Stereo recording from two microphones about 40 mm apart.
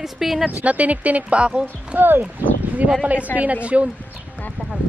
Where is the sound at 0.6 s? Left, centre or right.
Right.